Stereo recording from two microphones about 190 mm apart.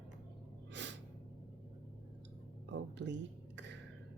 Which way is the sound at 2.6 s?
70° right (ahead or behind).